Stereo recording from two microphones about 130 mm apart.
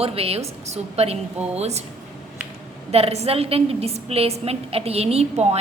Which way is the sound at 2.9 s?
50° right (ahead or behind).